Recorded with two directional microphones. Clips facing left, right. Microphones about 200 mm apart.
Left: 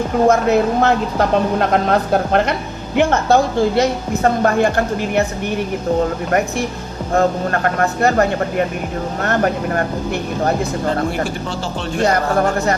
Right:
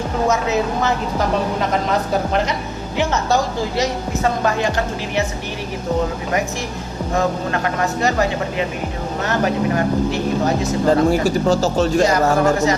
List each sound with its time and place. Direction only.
0.3 s a woman's voice: 55° left (ahead or behind)
7.1 s a woman's voice: 55° left (ahead or behind)
11.4 s speech: 40° right (ahead or behind)